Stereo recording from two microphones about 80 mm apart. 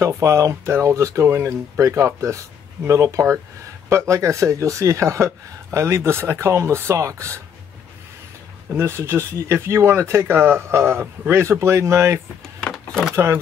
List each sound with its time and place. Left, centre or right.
0.0 s speech: right
8.7 s speech: right
12.7 s a sound: centre
13.1 s speech: right